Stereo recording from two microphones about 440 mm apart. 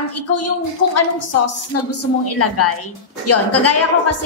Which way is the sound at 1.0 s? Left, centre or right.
Left.